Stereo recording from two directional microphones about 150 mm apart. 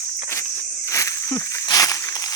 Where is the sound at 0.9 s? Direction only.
20° left (ahead or behind).